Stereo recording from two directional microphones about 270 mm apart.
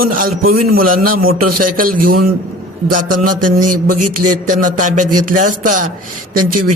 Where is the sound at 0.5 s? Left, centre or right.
Right.